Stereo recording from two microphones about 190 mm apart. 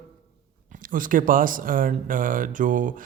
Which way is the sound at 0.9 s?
45° right (ahead or behind).